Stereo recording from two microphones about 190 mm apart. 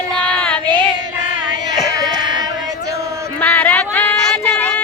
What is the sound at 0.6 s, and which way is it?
Child singing, 25° right (ahead or behind).